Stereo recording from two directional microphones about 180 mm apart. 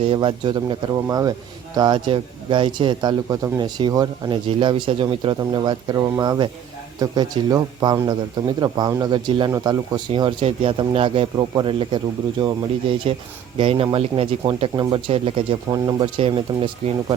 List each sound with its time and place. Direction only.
0.0 s a man's voice: 30° right (ahead or behind)